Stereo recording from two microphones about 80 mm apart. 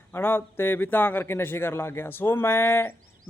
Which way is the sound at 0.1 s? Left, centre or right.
Left.